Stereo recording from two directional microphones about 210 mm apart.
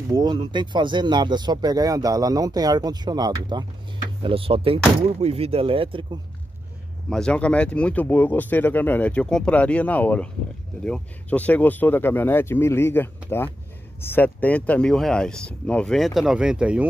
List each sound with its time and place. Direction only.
0.1 s speech: 20° right (ahead or behind)
7.1 s speech: 5° left (ahead or behind)